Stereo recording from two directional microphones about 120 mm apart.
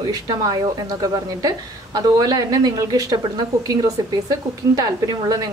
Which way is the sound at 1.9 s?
35° right (ahead or behind).